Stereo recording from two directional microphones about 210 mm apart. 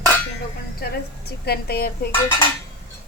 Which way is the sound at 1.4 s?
50° left (ahead or behind).